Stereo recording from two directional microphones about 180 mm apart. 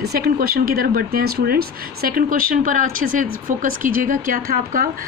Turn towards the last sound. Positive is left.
turn(degrees=-55)  # may be behind; listen again after turning